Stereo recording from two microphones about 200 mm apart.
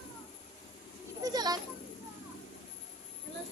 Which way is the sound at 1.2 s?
20° right (ahead or behind).